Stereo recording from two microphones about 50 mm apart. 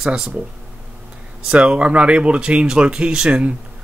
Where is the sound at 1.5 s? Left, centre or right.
Right.